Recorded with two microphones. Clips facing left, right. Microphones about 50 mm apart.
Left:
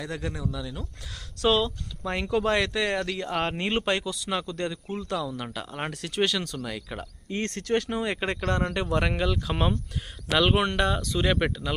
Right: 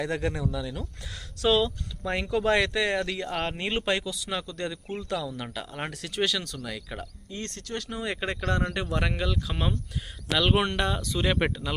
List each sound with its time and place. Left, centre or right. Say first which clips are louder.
0.1 s speech: right 4 dB; right
0.5 s speech: right 2 dB; centre
1.4 s speech: even; centre
3.2 s speech: left 2 dB; centre
4.3 s speech: left 4 dB; centre
5.3 s speech: left 1 dB; centre
7.2 s speech: left 10 dB; left
8.0 s speech: left 2 dB; centre
10.5 s speech: left 1 dB; centre